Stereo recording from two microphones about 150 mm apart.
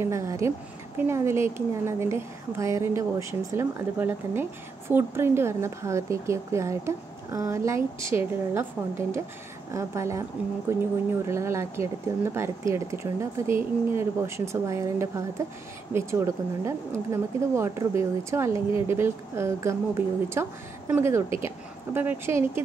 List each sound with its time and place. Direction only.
0.0 s a woman's voice: 20° right (ahead or behind)